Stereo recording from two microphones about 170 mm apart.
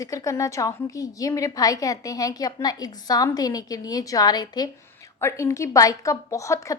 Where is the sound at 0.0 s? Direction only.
20° left (ahead or behind).